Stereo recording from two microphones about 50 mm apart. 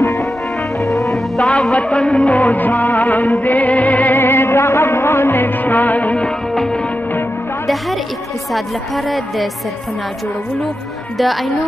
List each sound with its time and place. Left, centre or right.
0.0 s music: left
0.9 s music: centre
1.5 s music: centre; by 6.2 s left
6.2 s music: centre
8.5 s a woman's voice: centre
11.1 s a woman's voice: centre